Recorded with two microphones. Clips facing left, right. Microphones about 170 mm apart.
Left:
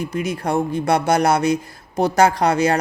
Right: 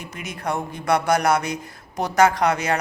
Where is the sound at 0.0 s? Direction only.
35° left (ahead or behind).